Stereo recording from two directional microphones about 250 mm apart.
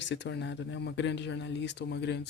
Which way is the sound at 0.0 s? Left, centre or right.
Left.